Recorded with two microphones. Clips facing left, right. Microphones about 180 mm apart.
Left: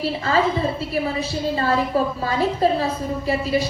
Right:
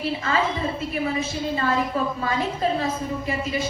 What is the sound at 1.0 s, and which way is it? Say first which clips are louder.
A woman's voice: left 2 dB; 35° left (ahead or behind).